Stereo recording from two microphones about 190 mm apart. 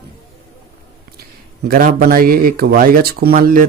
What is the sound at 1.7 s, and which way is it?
Speech, 45° right (ahead or behind).